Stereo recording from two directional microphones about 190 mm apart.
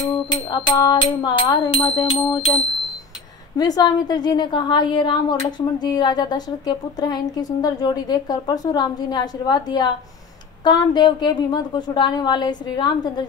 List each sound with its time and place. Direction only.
0.0 s a woman's voice: 20° left (ahead or behind)
3.5 s a woman's voice: 20° left (ahead or behind)